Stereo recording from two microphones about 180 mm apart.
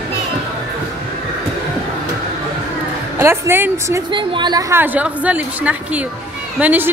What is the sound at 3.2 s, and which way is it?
A woman's voice, 15° right (ahead or behind).